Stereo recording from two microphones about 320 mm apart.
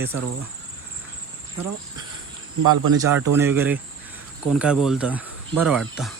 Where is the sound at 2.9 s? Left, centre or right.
Centre.